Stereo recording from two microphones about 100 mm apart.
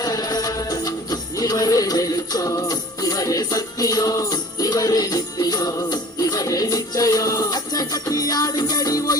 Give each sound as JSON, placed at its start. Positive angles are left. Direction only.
{"t": 0.0, "sound": "music", "side_deg": 40}